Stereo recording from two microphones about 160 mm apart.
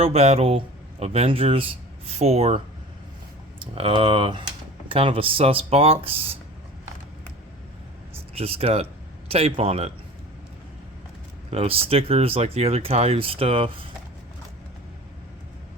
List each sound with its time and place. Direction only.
0.0 s speech: 40° right (ahead or behind)
3.6 s speech: 35° right (ahead or behind)
8.4 s speech: 40° right (ahead or behind)
11.5 s speech: 35° right (ahead or behind)